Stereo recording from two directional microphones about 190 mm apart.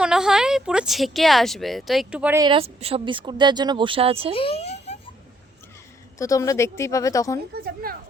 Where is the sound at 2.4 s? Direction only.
25° right (ahead or behind).